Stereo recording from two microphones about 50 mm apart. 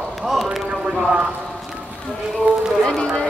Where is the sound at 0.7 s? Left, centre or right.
Centre.